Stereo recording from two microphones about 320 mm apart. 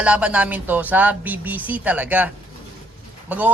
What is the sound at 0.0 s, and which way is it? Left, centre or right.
Speech, centre.